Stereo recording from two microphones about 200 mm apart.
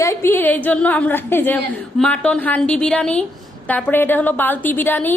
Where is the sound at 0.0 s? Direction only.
15° left (ahead or behind).